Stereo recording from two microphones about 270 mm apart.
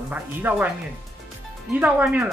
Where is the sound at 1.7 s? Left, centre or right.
Centre.